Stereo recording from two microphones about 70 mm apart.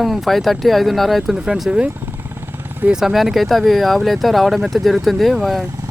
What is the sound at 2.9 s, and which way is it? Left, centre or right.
Speech, centre.